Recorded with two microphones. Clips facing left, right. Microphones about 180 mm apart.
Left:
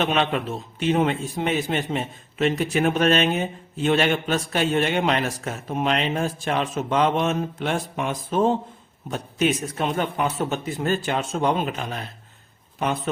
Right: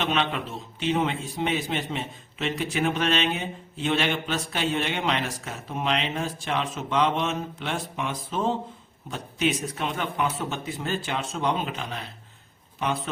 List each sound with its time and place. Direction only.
0.0 s a man's voice: 50° left (ahead or behind)